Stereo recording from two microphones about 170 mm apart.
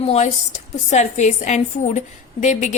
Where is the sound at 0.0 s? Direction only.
40° left (ahead or behind).